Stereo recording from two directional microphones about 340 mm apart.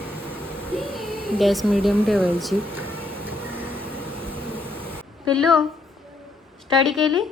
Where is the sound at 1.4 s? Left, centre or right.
Centre.